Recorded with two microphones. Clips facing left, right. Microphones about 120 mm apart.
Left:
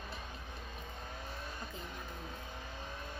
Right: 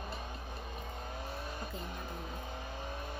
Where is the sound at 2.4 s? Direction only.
50° right (ahead or behind).